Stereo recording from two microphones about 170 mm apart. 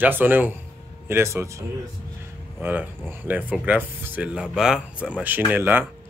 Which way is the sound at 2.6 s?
10° right (ahead or behind).